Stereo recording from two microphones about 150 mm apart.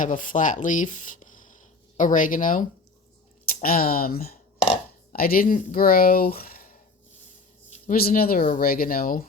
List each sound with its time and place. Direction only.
0.0 s speech: 60° left (ahead or behind)
3.4 s speech: 75° left (ahead or behind)
7.9 s speech: 85° left